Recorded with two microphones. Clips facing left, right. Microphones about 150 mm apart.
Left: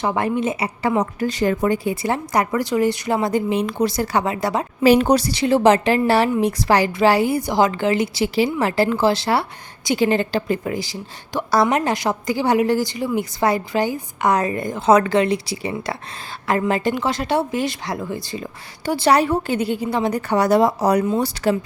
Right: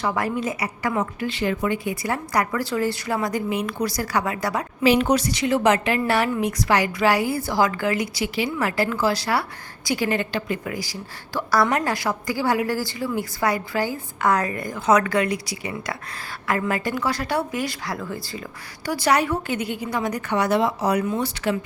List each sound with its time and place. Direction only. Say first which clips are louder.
0.0 s speech: left 4 dB; 25° left (ahead or behind)
1.2 s speech: left 5 dB; 40° left (ahead or behind); by 4.6 s 25° left (ahead or behind)
4.8 s a woman's voice: left 4 dB; 40° left (ahead or behind)